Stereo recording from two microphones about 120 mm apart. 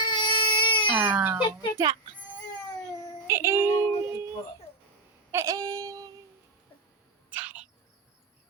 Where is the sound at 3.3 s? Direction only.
20° right (ahead or behind).